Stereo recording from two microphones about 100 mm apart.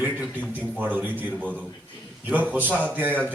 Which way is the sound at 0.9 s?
20° right (ahead or behind).